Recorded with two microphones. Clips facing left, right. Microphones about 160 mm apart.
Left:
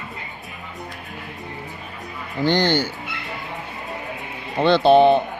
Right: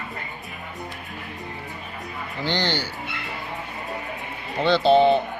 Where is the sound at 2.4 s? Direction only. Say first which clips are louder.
Left 7 dB; 50° left (ahead or behind).